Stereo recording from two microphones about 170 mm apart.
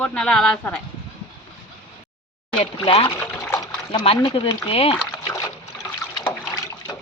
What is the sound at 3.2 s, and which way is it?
Water, 10° left (ahead or behind).